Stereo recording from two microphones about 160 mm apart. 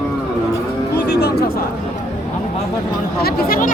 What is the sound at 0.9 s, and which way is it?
Music, 90° left.